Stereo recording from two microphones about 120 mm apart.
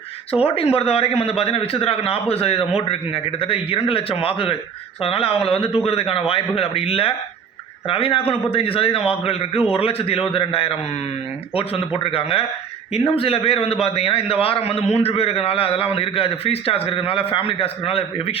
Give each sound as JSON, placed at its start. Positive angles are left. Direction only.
{"t": 0.4, "sound": "a man's voice", "side_deg": 55}
{"t": 12.1, "sound": "a man's voice", "side_deg": 50}